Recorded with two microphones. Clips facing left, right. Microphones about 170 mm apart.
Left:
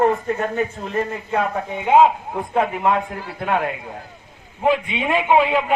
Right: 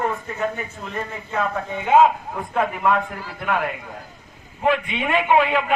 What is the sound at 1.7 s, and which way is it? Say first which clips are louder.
A man's voice: left 1 dB; 15° left (ahead or behind).